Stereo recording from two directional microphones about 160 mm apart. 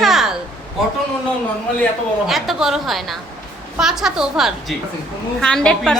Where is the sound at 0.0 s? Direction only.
Centre (ahead or behind).